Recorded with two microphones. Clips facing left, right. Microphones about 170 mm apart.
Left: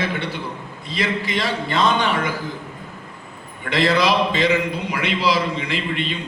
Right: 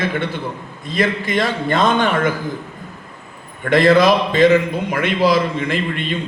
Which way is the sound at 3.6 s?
50° right (ahead or behind).